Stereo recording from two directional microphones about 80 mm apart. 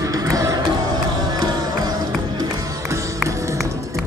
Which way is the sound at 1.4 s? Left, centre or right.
Right.